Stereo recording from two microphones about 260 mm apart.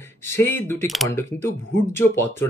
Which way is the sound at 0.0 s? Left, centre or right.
Centre.